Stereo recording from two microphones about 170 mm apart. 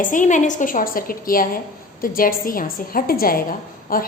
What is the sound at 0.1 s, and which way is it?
A woman's voice, 45° left (ahead or behind).